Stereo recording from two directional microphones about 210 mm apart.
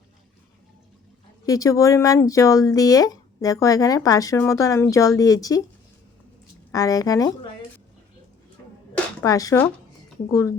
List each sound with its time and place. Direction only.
1.5 s speech: 15° left (ahead or behind)
6.7 s speech: 15° left (ahead or behind)
9.2 s speech: 15° left (ahead or behind)